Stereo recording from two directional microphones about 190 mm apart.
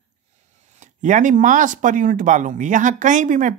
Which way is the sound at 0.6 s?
40° right (ahead or behind).